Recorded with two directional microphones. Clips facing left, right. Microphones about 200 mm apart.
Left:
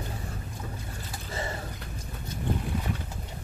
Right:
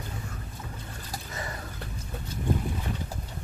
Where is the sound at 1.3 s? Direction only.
25° left (ahead or behind).